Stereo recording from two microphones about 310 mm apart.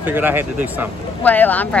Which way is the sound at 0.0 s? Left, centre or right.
Centre.